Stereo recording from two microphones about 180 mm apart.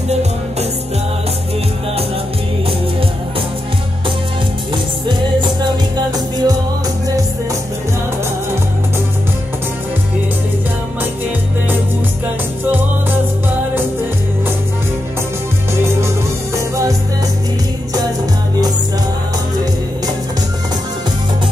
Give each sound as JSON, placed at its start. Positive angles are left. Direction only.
{"t": 0.1, "sound": "music", "side_deg": -35}
{"t": 5.0, "sound": "music", "side_deg": -25}
{"t": 16.5, "sound": "music", "side_deg": -15}